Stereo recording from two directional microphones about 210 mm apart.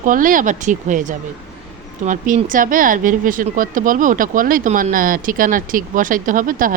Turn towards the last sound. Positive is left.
turn(degrees=-40)  # may be behind; listen again after turning